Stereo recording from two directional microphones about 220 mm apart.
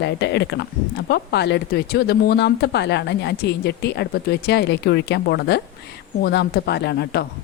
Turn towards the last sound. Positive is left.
turn(degrees=50)  # may be behind; listen again after turning